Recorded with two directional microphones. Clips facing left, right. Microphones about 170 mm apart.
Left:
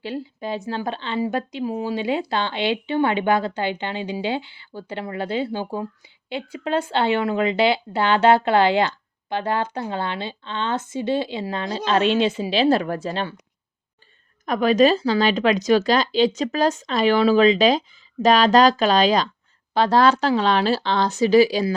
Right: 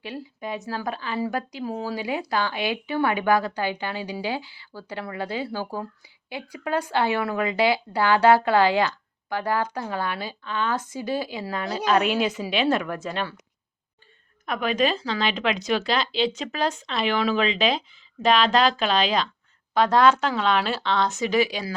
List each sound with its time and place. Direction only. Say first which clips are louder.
0.0 s speech: left 5 dB; 30° left (ahead or behind)
14.4 s speech: left 7 dB; 40° left (ahead or behind)